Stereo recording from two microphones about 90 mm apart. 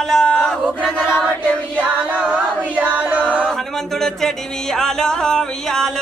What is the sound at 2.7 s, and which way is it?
Choir, 15° right (ahead or behind).